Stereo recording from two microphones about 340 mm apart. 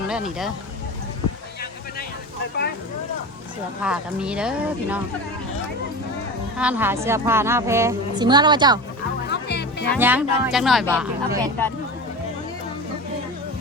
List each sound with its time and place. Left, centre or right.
0.1 s speech: centre
3.8 s speech: centre
6.6 s a woman's voice: centre
9.3 s music: left
9.9 s speech: centre